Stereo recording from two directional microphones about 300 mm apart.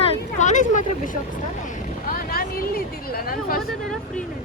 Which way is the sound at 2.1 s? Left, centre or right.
Left.